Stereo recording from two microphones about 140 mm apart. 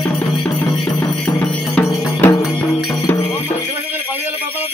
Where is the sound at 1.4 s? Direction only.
10° left (ahead or behind).